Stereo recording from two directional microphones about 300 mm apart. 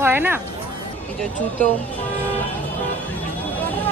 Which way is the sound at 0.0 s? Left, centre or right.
Centre.